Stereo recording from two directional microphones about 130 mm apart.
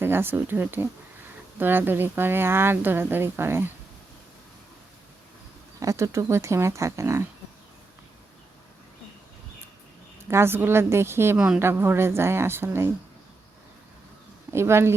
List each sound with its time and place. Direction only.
0.0 s speech: 15° right (ahead or behind)
5.8 s speech: 25° right (ahead or behind)
10.2 s speech: 20° right (ahead or behind)
11.3 s speech: 5° right (ahead or behind)
11.6 s speech: 15° right (ahead or behind)
14.5 s speech: 20° right (ahead or behind)